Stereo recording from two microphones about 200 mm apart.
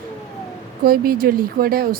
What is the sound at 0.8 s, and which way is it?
A woman's voice, 50° right (ahead or behind).